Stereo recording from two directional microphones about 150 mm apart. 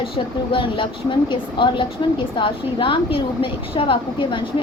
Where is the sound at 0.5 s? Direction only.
35° left (ahead or behind).